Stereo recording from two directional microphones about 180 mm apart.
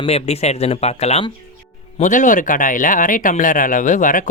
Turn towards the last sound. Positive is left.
turn(degrees=45)  # may be behind; listen again after turning